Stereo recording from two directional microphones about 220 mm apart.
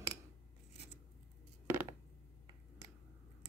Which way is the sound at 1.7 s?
10° right (ahead or behind).